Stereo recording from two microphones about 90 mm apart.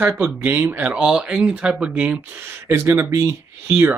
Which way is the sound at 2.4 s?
30° right (ahead or behind).